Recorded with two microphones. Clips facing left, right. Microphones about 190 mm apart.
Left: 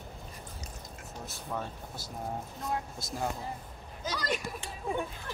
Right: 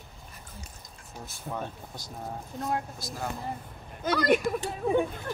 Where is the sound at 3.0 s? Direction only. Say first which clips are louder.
Right 1 dB; 25° left (ahead or behind).